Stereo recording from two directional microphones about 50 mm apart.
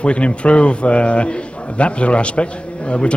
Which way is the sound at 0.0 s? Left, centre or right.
Left.